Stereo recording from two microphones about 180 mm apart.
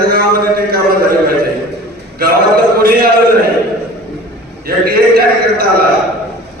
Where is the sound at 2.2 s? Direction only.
55° right (ahead or behind).